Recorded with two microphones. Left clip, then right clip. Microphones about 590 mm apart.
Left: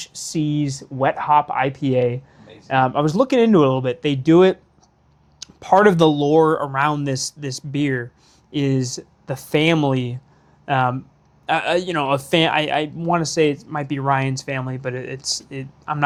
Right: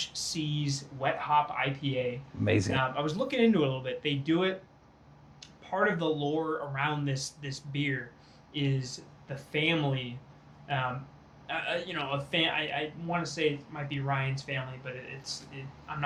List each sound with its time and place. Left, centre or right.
0.0 s a sound: left
0.3 s speech: left
11.4 s speech: left